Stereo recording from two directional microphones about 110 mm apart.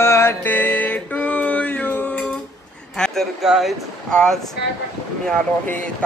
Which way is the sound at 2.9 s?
5° left (ahead or behind).